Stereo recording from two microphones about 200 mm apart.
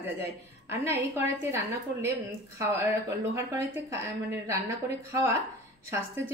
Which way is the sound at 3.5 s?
10° right (ahead or behind).